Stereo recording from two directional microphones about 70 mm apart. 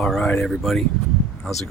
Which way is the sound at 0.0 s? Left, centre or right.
Centre.